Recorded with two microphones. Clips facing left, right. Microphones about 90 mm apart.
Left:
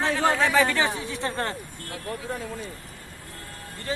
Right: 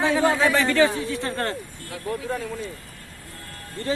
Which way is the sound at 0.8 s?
20° left (ahead or behind).